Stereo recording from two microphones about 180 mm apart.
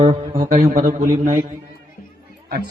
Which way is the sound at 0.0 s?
30° right (ahead or behind).